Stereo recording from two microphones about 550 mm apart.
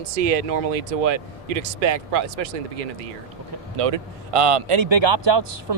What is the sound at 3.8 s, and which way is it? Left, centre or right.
A man's voice, right.